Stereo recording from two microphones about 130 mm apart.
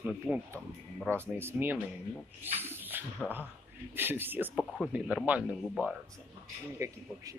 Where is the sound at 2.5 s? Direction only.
15° right (ahead or behind).